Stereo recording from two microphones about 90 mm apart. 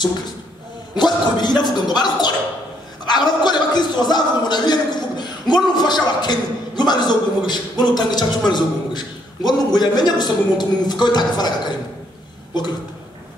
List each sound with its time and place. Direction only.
0.9 s a man's voice: 50° left (ahead or behind)